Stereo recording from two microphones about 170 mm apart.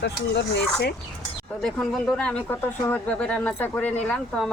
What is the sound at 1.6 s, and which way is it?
Speech, centre (ahead or behind).